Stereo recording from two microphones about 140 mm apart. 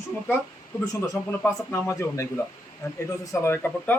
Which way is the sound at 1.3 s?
20° left (ahead or behind).